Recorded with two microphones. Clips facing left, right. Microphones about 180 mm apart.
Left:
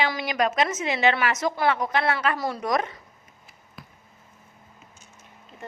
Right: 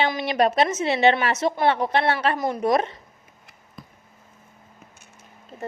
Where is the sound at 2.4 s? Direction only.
20° right (ahead or behind).